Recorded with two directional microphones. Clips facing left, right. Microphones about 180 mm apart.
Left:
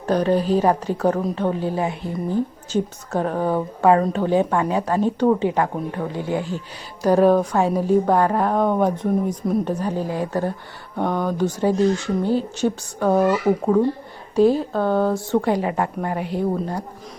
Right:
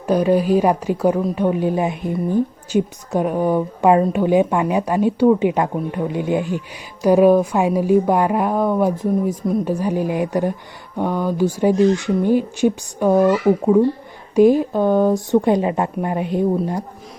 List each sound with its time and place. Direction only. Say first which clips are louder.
0.1 s a woman's voice: right 3 dB; 10° right (ahead or behind)
13.2 s speech: right 3 dB; 10° left (ahead or behind)
14.3 s a woman's voice: right 4 dB; 15° right (ahead or behind)